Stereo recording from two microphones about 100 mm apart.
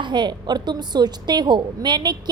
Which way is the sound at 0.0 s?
50° right (ahead or behind).